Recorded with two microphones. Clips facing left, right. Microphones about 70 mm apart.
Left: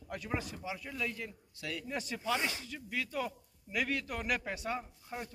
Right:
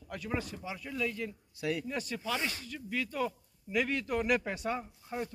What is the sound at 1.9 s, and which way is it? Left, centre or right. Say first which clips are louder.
Speech: even; centre.